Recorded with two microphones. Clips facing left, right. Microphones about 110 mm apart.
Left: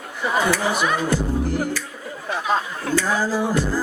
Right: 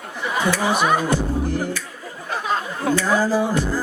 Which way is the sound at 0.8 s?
45° right (ahead or behind).